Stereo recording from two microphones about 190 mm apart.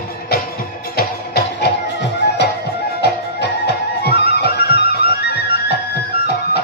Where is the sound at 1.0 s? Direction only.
55° left (ahead or behind).